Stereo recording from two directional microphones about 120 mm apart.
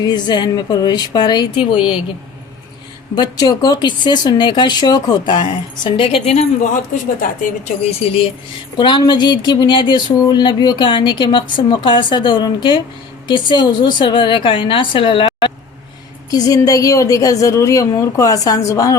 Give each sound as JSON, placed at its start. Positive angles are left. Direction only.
{"t": 0.0, "sound": "speech", "side_deg": 35}
{"t": 3.2, "sound": "speech", "side_deg": 35}
{"t": 6.9, "sound": "a woman's voice", "side_deg": 90}
{"t": 7.6, "sound": "a woman's voice", "side_deg": 55}
{"t": 8.8, "sound": "a woman's voice", "side_deg": 40}
{"t": 16.3, "sound": "a woman's voice", "side_deg": 30}